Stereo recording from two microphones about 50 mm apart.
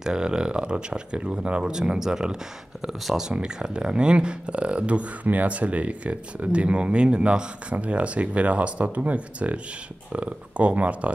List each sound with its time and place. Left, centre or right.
0.0 s speech: centre